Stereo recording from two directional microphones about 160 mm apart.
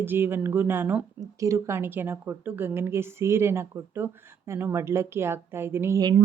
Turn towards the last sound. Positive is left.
turn(degrees=-20)  # may be behind; listen again after turning